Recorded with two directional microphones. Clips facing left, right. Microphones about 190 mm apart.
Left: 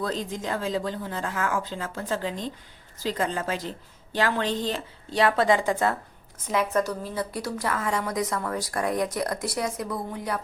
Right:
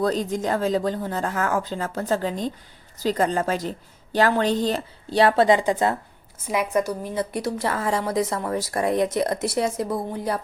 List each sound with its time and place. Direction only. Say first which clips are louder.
0.0 s a woman's voice: right 7 dB; 40° right (ahead or behind)
5.5 s a woman's voice: right 3 dB; 20° right (ahead or behind)